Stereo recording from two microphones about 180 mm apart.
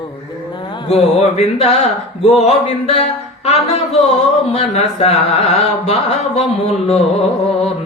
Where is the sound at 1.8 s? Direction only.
35° left (ahead or behind).